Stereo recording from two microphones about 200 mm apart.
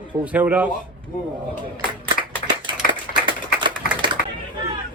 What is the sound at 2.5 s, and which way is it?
Typewriter, 25° right (ahead or behind).